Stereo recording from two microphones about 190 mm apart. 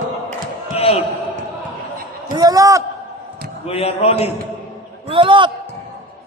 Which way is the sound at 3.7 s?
30° left (ahead or behind).